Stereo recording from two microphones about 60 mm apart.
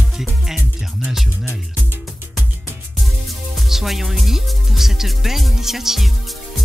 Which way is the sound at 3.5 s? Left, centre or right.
Centre.